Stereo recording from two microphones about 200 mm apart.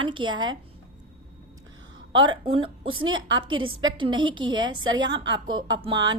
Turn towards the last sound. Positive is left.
turn(degrees=-20)  # may be behind; listen again after turning